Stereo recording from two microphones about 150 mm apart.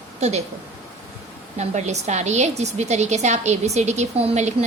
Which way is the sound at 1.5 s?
50° right (ahead or behind).